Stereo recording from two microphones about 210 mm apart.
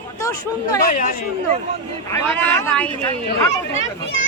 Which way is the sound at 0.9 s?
40° left (ahead or behind).